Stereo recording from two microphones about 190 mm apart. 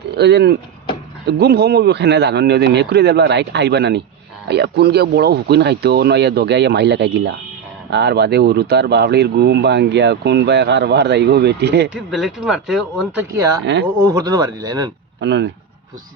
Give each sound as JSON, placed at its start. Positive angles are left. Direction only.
{"t": 0.2, "sound": "speech", "side_deg": -60}
{"t": 11.9, "sound": "speech", "side_deg": -5}
{"t": 13.7, "sound": "speech", "side_deg": -70}
{"t": 14.1, "sound": "speech", "side_deg": -20}
{"t": 15.2, "sound": "speech", "side_deg": -70}